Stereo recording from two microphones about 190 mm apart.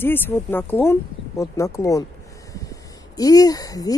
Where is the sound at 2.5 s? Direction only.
20° left (ahead or behind).